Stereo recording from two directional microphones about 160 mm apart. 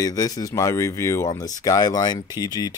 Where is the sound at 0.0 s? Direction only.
20° left (ahead or behind).